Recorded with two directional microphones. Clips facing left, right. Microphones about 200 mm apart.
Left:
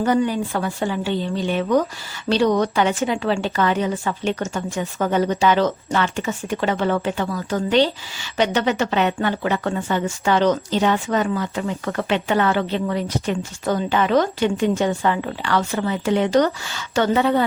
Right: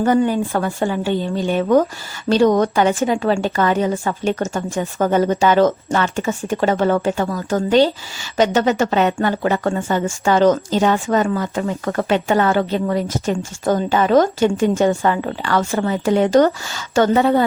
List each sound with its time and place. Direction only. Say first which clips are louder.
0.0 s a woman's voice: right 3 dB; 50° right (ahead or behind)